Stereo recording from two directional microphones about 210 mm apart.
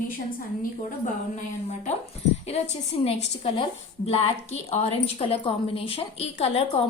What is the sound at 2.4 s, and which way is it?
A woman's voice, 30° left (ahead or behind).